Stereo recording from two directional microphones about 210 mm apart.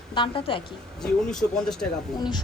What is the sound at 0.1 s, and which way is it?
Speech, 25° left (ahead or behind).